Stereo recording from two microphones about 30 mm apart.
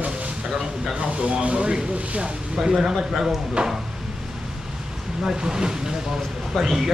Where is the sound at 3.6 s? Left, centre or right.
Right.